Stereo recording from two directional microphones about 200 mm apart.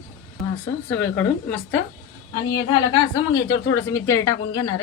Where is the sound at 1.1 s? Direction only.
5° left (ahead or behind).